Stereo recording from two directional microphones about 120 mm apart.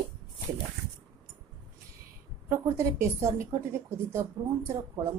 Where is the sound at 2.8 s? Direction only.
25° right (ahead or behind).